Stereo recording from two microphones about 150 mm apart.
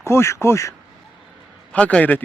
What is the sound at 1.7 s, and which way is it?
Speech, 10° left (ahead or behind).